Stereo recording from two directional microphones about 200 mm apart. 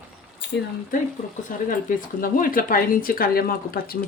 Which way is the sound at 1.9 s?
45° left (ahead or behind).